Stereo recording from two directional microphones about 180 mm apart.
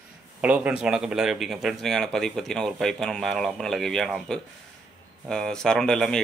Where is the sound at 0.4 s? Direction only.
5° right (ahead or behind).